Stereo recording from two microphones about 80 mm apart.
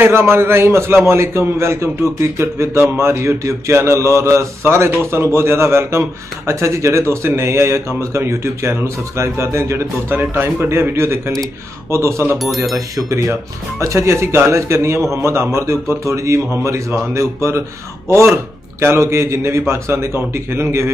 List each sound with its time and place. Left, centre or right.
0.0 s speech: right
10.0 s speech: right
14.0 s speech: right